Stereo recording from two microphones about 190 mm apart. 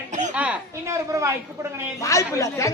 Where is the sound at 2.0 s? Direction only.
15° left (ahead or behind).